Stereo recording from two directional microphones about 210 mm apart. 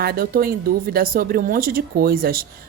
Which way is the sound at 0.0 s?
45° right (ahead or behind).